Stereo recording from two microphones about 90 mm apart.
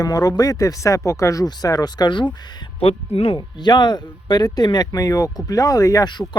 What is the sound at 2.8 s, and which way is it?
Speech, 90° left.